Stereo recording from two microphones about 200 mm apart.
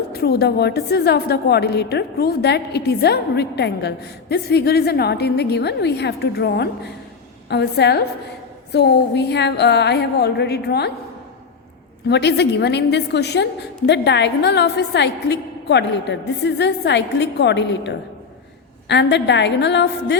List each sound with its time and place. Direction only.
0.1 s a woman's voice: 50° left (ahead or behind)
12.0 s a woman's voice: 55° left (ahead or behind)